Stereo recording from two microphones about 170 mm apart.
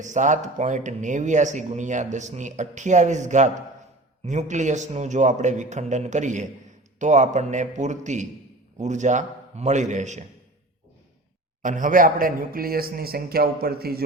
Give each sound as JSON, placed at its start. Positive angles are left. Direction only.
{"t": 0.0, "sound": "speech", "side_deg": -45}
{"t": 11.6, "sound": "speech", "side_deg": -50}